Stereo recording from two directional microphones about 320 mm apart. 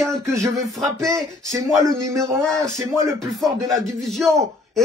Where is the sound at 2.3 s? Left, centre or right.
Centre.